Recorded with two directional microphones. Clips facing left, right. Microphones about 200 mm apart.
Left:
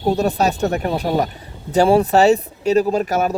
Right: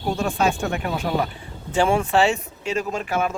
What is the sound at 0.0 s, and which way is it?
Speech, 40° left (ahead or behind).